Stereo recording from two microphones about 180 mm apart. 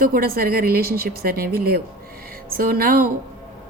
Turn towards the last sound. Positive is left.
turn(degrees=-55)  # may be behind; listen again after turning